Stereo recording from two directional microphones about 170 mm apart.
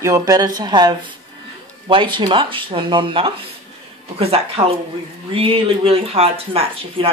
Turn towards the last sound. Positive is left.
turn(degrees=-35)  # may be behind; listen again after turning